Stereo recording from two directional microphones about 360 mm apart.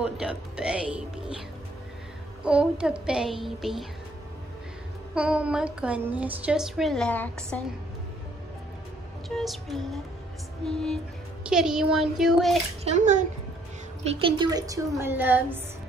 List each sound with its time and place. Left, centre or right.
0.0 s a woman's voice: centre
2.4 s a woman's voice: centre
5.1 s a woman's voice: centre
9.3 s a woman's voice: centre
12.8 s a child's voice: centre